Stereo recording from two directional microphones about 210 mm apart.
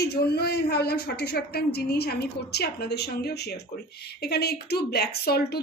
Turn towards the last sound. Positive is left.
turn(degrees=50)  # may be behind; listen again after turning